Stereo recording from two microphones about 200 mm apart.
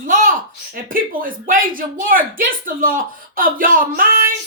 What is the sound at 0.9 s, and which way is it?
Speech, 45° right (ahead or behind).